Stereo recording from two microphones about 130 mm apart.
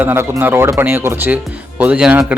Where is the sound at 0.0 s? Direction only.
15° right (ahead or behind).